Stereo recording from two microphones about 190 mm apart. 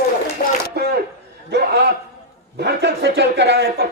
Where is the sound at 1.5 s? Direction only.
60° right (ahead or behind).